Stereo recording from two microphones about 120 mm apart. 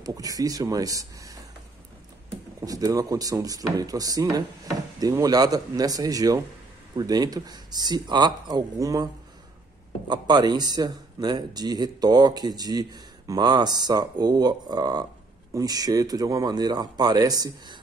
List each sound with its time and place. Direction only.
0.0 s speech: 30° right (ahead or behind)
2.6 s speech: 30° right (ahead or behind)